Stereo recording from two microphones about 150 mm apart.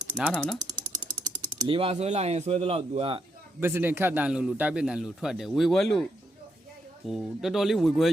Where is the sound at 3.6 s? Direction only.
15° right (ahead or behind); by 6.1 s 5° left (ahead or behind).